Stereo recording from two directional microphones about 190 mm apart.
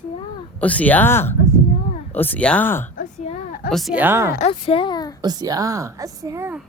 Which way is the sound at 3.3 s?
45° left (ahead or behind).